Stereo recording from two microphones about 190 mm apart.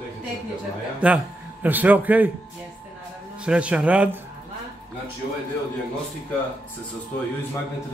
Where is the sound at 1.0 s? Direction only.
10° right (ahead or behind).